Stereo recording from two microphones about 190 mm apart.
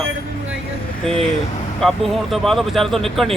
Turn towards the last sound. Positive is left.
turn(degrees=0)  # may be behind; listen again after turning